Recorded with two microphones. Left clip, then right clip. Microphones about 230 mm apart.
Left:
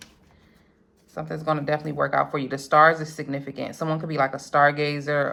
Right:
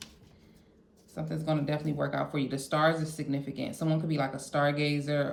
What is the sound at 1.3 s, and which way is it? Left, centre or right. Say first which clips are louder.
Speech: left 7 dB; left.